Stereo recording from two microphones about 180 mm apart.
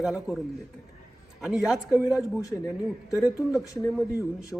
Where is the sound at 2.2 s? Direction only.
20° left (ahead or behind).